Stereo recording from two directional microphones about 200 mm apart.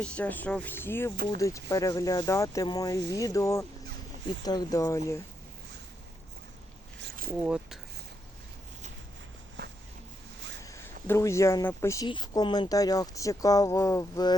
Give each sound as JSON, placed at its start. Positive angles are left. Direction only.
{"t": 0.0, "sound": "speech", "side_deg": 5}
{"t": 7.0, "sound": "zipper", "side_deg": -45}
{"t": 7.4, "sound": "speech", "side_deg": -5}
{"t": 10.6, "sound": "speech", "side_deg": 15}